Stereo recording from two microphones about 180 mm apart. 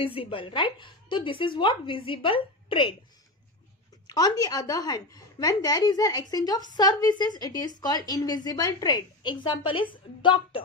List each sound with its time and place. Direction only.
0.0 s a woman's voice: 30° left (ahead or behind)
4.1 s a woman's voice: 20° left (ahead or behind)